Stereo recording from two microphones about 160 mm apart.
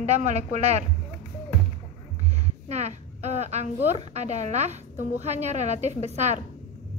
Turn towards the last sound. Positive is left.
turn(degrees=-45)  # may be behind; listen again after turning